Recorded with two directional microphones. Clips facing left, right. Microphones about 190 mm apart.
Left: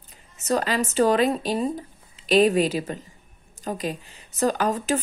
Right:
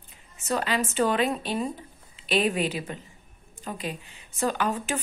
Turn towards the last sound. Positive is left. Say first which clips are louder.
# left 4 dB
turn(degrees=40)  # may be behind; listen again after turning